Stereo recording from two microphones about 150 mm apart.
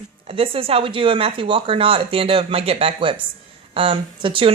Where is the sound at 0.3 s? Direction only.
35° right (ahead or behind).